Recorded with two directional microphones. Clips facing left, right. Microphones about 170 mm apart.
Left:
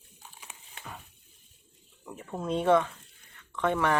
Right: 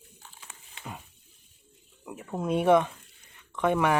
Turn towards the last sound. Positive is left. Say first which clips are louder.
# right 2 dB
turn(degrees=-10)  # may be behind; listen again after turning